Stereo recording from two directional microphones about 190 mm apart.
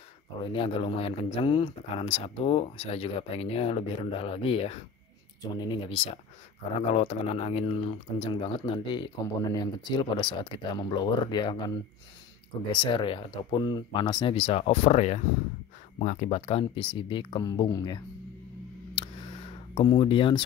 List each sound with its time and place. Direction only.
0.5 s speech: 30° left (ahead or behind)
6.9 s speech: 35° left (ahead or behind)
12.8 s speech: 25° left (ahead or behind)
19.7 s speech: 25° left (ahead or behind)